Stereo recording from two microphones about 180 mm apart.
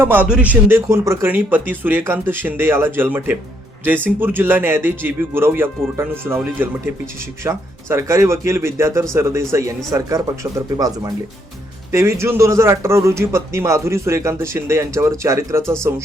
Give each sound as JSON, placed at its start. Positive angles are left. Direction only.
{"t": 0.0, "sound": "speech", "side_deg": -10}